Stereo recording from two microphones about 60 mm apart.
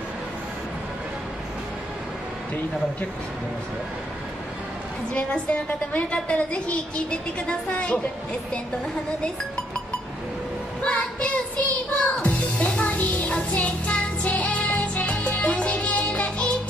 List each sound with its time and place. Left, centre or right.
5.1 s a woman's voice: left
10.8 s music: left